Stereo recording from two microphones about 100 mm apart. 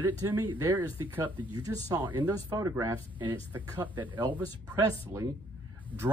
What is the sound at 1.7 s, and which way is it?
Speech, 35° right (ahead or behind).